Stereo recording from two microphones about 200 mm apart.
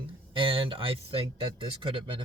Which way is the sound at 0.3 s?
25° right (ahead or behind).